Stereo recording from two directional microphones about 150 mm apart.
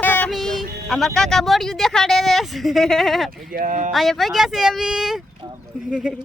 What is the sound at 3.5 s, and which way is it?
Speech, 65° right (ahead or behind).